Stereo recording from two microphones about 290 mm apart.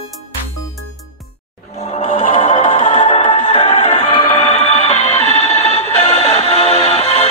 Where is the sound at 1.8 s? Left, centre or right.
Left.